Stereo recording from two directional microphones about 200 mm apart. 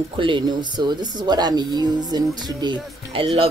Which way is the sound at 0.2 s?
25° right (ahead or behind).